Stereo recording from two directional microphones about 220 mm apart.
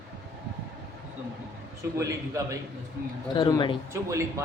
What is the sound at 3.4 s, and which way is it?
Speech, 20° left (ahead or behind).